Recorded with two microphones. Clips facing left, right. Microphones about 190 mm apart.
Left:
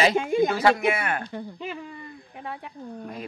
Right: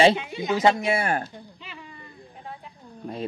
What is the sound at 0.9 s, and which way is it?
Speech, 30° right (ahead or behind).